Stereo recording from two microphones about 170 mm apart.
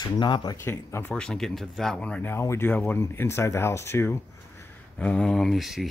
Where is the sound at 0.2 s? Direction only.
25° left (ahead or behind).